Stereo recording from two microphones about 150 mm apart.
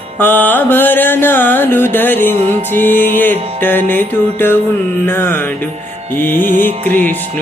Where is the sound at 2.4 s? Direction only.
50° right (ahead or behind).